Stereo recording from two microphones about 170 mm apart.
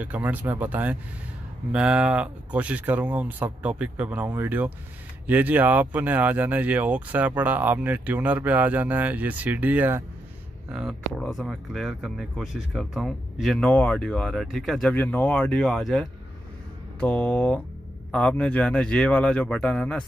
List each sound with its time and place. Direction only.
0.0 s speech: 10° right (ahead or behind)
10.7 s speech: centre (ahead or behind)